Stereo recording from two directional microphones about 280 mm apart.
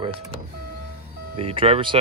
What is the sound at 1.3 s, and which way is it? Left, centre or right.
Speech, centre.